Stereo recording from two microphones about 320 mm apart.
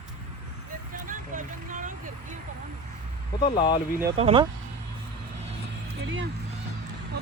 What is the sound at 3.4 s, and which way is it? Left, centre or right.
Speech, centre.